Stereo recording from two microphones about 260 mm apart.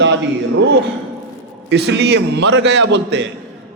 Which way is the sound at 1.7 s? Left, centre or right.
Right.